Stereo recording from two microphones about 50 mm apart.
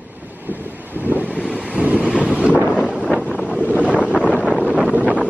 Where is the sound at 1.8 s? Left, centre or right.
Right.